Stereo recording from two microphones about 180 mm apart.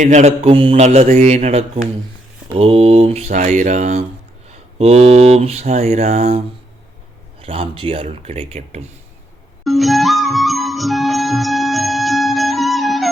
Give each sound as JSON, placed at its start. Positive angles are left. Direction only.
{"t": 0.0, "sound": "speech", "side_deg": -40}
{"t": 7.4, "sound": "speech", "side_deg": -30}
{"t": 9.6, "sound": "music", "side_deg": 0}